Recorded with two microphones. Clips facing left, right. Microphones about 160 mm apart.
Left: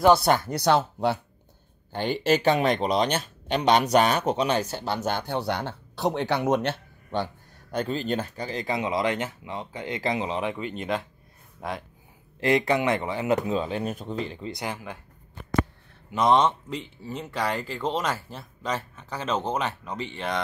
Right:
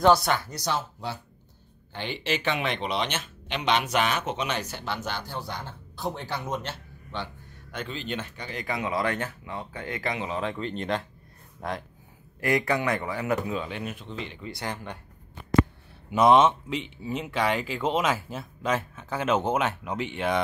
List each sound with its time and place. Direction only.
0.5 s speech: 65° left (ahead or behind)
1.9 s speech: 45° left (ahead or behind)
5.1 s speech: 65° left (ahead or behind)
7.1 s speech: 45° left (ahead or behind); by 10.4 s 30° left (ahead or behind)
10.4 s speech: 10° left (ahead or behind)
12.4 s speech: 25° left (ahead or behind)
14.5 s speech: 10° left (ahead or behind)
16.2 s speech: 5° right (ahead or behind)